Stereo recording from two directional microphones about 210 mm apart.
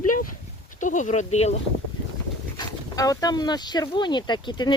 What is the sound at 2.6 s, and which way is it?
Speech, 15° left (ahead or behind).